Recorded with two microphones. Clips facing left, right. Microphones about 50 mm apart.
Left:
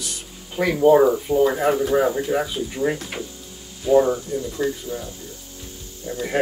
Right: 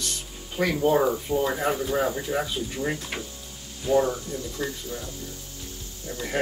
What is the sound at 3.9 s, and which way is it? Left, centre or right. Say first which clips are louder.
Speech: left 6 dB; centre.